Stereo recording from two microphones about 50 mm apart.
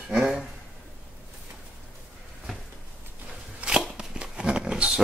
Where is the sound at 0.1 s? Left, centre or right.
Centre.